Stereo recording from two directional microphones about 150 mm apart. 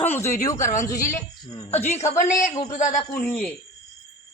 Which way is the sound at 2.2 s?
65° left (ahead or behind).